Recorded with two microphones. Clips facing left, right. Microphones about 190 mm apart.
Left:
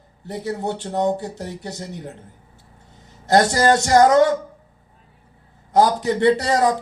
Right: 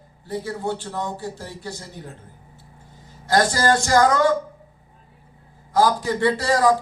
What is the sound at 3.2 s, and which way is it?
A man's voice, 25° left (ahead or behind).